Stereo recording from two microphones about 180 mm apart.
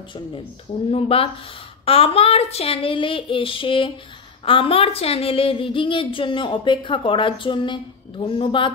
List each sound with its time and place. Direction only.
0.9 s speech: 30° left (ahead or behind)